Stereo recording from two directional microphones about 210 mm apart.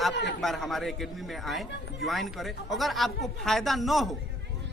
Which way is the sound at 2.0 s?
Centre (ahead or behind).